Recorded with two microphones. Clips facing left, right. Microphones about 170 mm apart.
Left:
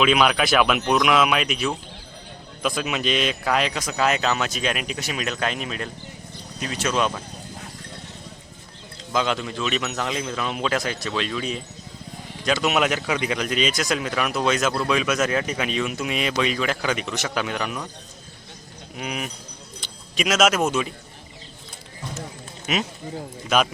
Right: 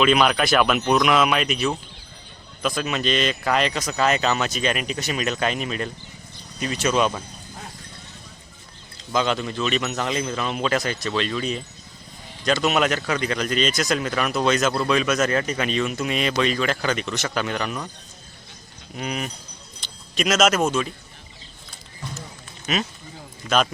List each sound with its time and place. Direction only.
0.0 s speech: centre (ahead or behind)
9.1 s speech: centre (ahead or behind)
18.9 s speech: 5° left (ahead or behind)
20.7 s a man's voice: 15° left (ahead or behind)
22.6 s speech: 20° left (ahead or behind)